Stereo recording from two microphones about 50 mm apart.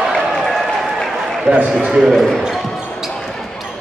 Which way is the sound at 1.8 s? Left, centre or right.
Centre.